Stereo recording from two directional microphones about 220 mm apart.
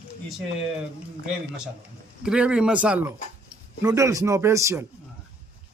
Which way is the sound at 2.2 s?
5° right (ahead or behind).